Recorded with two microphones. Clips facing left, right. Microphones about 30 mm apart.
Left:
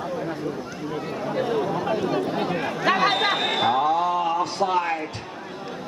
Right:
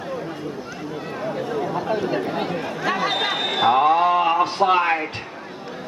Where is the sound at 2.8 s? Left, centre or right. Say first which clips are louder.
Left 3 dB; left.